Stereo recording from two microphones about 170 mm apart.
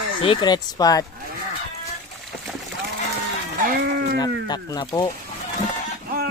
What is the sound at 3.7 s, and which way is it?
Speech, 65° right (ahead or behind).